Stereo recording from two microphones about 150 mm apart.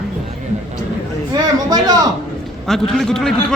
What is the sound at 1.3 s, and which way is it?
Speech, 25° right (ahead or behind).